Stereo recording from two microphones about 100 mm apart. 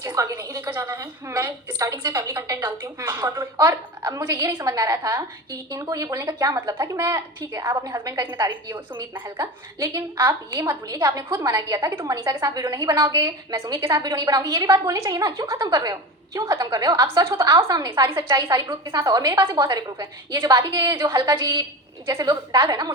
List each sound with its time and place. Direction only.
0.0 s a woman's voice: 35° right (ahead or behind)